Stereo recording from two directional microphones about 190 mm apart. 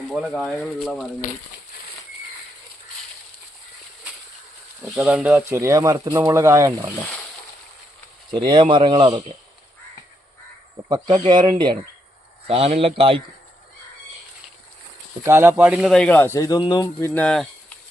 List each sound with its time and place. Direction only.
0.1 s speech: centre (ahead or behind)
4.8 s speech: 5° right (ahead or behind)
8.3 s speech: 25° right (ahead or behind)
10.8 s speech: 20° right (ahead or behind)
15.2 s speech: 10° right (ahead or behind); by 17.5 s 5° left (ahead or behind)